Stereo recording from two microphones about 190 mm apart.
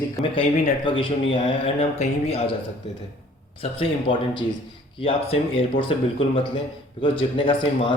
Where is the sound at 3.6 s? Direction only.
30° left (ahead or behind).